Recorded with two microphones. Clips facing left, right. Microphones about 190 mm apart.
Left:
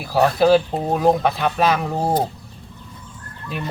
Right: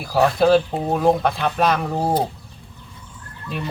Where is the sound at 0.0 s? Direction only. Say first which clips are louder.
Left 1 dB; centre (ahead or behind).